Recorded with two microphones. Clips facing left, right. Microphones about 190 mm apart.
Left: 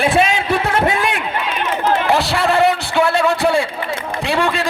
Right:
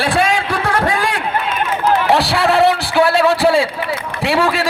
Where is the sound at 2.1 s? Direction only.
Centre (ahead or behind).